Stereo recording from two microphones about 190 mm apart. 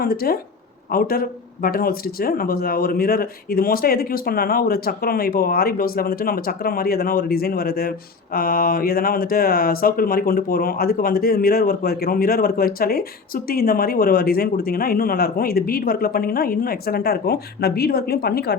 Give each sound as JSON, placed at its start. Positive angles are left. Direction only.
{"t": 0.0, "sound": "speech", "side_deg": 55}